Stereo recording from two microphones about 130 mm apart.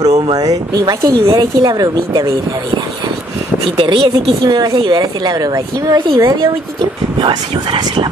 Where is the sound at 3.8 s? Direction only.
40° right (ahead or behind).